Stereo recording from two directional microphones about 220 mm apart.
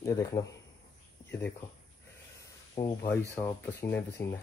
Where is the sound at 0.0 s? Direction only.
15° left (ahead or behind).